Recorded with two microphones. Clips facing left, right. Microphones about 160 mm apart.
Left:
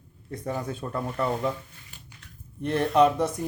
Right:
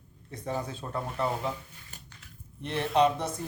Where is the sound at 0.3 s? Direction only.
50° left (ahead or behind).